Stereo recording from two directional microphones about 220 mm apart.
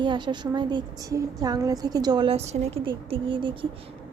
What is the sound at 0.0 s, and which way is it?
A woman's voice, 20° right (ahead or behind).